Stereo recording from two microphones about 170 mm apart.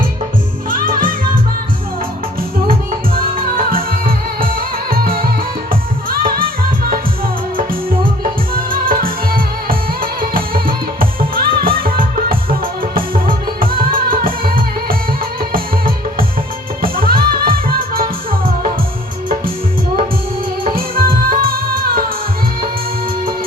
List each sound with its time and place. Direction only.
0.7 s music: 55° right (ahead or behind)
3.2 s music: 60° right (ahead or behind)
20.7 s music: 60° right (ahead or behind)